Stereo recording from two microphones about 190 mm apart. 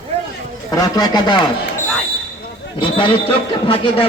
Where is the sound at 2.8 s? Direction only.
25° left (ahead or behind).